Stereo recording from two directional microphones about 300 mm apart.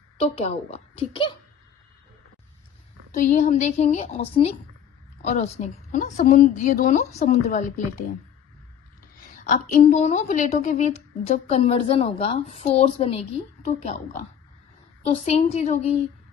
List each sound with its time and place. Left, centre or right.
0.2 s a woman's voice: left
3.1 s a woman's voice: left
9.3 s a woman's voice: left
15.0 s a woman's voice: left